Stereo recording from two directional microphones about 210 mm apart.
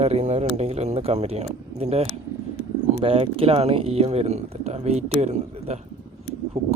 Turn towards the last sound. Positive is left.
turn(degrees=-30)  # may be behind; listen again after turning